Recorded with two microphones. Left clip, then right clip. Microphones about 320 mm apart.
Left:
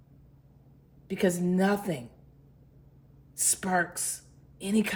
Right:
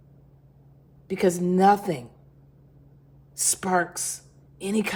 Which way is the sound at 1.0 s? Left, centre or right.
Centre.